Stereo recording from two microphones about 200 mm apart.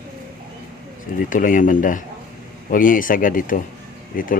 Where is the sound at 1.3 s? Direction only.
40° left (ahead or behind).